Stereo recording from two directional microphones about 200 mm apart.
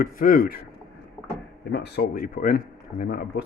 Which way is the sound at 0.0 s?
45° left (ahead or behind).